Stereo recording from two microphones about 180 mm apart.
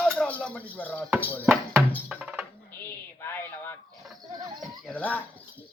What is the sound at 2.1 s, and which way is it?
Speech, 5° right (ahead or behind).